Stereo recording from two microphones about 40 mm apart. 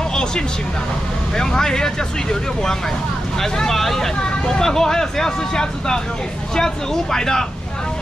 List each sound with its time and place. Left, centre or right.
1.3 s speech: centre
3.3 s speech: centre